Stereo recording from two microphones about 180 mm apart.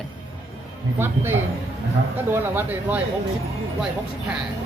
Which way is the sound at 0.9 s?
10° right (ahead or behind).